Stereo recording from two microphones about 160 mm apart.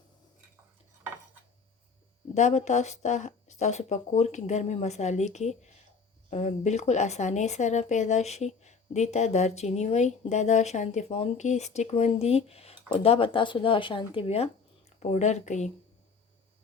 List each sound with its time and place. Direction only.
2.3 s speech: 45° left (ahead or behind)